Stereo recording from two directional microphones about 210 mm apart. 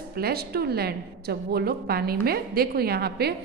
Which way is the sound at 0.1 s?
50° right (ahead or behind).